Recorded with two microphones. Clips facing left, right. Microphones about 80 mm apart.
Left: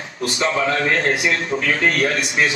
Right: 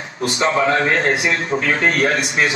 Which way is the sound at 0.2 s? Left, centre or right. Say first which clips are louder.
Right 3 dB; right.